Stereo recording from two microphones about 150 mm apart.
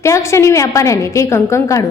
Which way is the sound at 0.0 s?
20° left (ahead or behind).